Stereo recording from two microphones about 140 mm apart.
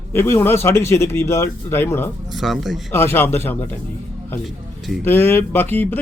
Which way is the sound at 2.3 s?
Centre (ahead or behind).